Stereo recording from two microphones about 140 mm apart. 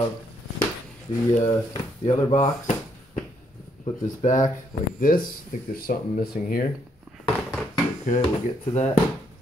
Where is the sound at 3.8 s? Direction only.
60° left (ahead or behind).